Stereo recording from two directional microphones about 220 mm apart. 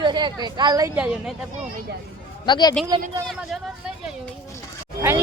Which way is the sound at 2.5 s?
20° left (ahead or behind).